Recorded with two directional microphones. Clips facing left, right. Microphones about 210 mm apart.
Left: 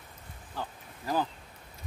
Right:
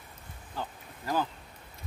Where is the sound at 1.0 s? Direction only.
15° left (ahead or behind).